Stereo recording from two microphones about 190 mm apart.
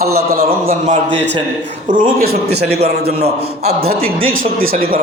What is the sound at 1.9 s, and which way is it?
A man's voice, 45° right (ahead or behind).